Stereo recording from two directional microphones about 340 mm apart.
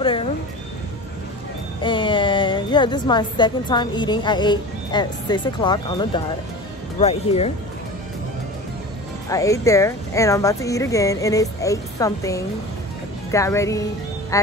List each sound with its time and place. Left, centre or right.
0.0 s speech: centre
1.8 s a woman's voice: centre
9.3 s speech: centre